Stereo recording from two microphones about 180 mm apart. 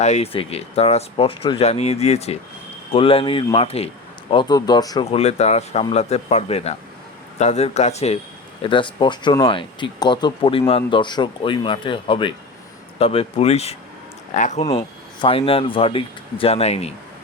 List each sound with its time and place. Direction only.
0.0 s speech: 35° left (ahead or behind)
5.1 s speech: 40° left (ahead or behind)